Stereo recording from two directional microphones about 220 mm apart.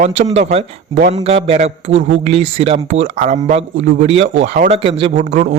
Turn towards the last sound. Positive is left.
turn(degrees=-35)  # may be behind; listen again after turning